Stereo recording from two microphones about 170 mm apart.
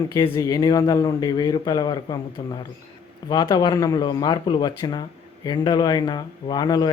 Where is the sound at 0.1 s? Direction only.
20° left (ahead or behind).